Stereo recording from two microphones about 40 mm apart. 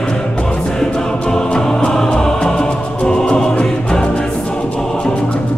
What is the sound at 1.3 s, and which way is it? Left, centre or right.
Music, centre.